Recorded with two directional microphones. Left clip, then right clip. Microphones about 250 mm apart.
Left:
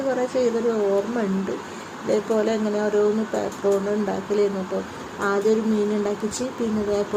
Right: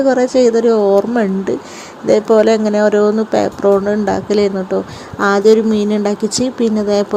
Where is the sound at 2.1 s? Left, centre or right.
Right.